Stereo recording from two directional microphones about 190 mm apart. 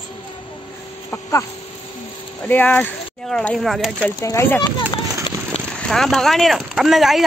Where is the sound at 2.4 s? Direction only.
10° left (ahead or behind).